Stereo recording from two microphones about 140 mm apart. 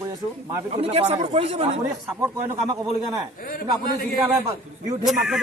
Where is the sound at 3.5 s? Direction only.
90° left.